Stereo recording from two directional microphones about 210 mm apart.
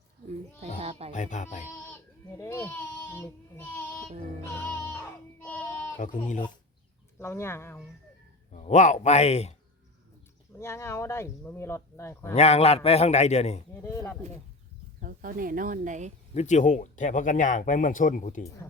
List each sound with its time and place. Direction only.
0.8 s speech: 30° right (ahead or behind)
1.1 s speech: 35° left (ahead or behind)
1.8 s goat: 15° left (ahead or behind)
4.7 s music: 10° left (ahead or behind)
5.5 s a sound: 10° left (ahead or behind)
6.0 s speech: 40° left (ahead or behind)
7.2 s speech: 10° left (ahead or behind)
8.5 s speech: 35° left (ahead or behind)
10.6 s speech: 10° left (ahead or behind)
12.3 s speech: 30° left (ahead or behind)
13.8 s speech: 10° left (ahead or behind)
15.0 s speech: 40° right (ahead or behind)
16.3 s speech: 35° left (ahead or behind)